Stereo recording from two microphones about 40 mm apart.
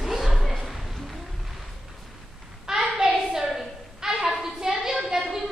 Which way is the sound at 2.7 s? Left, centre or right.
Centre.